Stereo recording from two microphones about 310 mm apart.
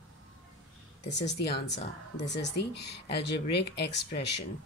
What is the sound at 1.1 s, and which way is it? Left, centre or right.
Speech, left.